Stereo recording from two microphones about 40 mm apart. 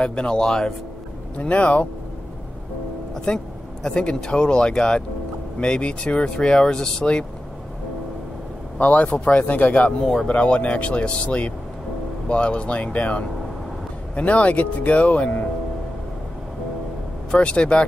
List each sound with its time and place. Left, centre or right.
0.0 s speech: left
1.4 s speech: left
3.3 s speech: centre
8.7 s a man's voice: left
9.9 s speech: centre
10.2 s speech: left
17.3 s speech: left